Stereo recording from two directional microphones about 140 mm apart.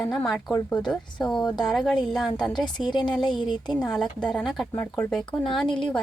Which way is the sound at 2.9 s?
30° left (ahead or behind).